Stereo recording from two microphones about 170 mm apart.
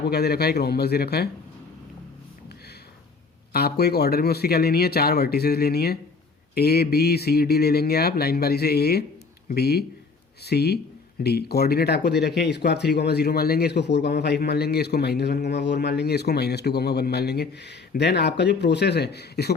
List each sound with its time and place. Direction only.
0.0 s speech: 70° left (ahead or behind)
3.5 s speech: 70° left (ahead or behind)